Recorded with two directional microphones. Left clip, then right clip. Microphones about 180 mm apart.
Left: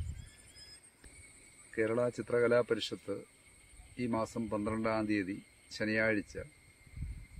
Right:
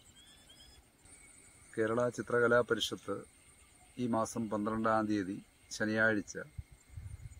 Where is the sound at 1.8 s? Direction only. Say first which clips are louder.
Even; 5° left (ahead or behind).